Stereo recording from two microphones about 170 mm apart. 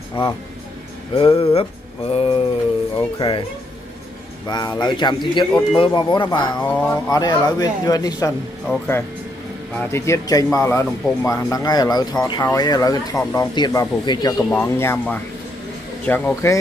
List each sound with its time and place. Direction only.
0.2 s a sound: 30° left (ahead or behind)
3.2 s speech: 30° left (ahead or behind)
4.5 s speech: 25° left (ahead or behind)
6.7 s speech: 10° left (ahead or behind)
7.1 s speech: 20° left (ahead or behind)
9.8 s speech: 15° left (ahead or behind)